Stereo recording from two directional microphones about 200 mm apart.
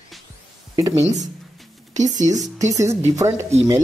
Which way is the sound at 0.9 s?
35° right (ahead or behind).